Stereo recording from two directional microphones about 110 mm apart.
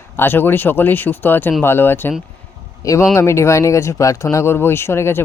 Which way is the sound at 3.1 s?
25° left (ahead or behind).